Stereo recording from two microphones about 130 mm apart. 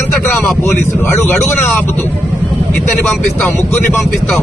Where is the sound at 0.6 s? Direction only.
20° left (ahead or behind).